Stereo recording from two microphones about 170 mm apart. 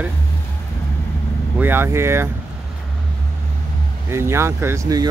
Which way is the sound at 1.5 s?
10° right (ahead or behind).